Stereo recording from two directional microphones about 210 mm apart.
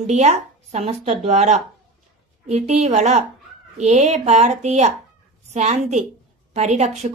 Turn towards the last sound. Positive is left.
turn(degrees=-35)  # may be behind; listen again after turning